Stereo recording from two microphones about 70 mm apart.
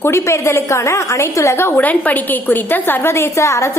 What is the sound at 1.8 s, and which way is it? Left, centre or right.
A woman's voice, left.